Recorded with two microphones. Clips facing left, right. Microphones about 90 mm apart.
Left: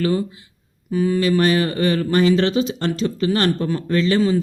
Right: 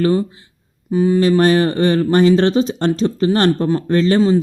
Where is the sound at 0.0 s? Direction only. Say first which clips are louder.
Right 4 dB; 30° right (ahead or behind).